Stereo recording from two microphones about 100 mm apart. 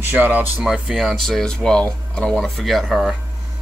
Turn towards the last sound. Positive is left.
turn(degrees=0)  # may be behind; listen again after turning